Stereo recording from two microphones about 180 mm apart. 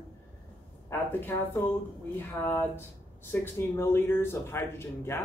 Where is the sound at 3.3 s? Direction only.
15° left (ahead or behind).